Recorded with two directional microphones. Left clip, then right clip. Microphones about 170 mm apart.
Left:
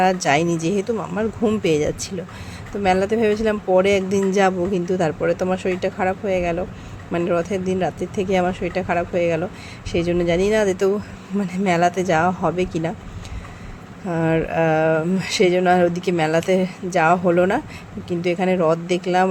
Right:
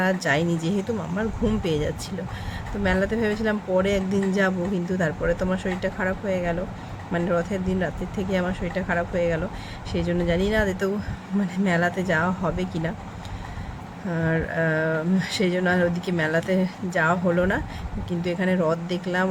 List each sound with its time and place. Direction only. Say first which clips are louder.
0.0 s speech: left 6 dB; 25° left (ahead or behind)
14.1 s speech: left 6 dB; 30° left (ahead or behind)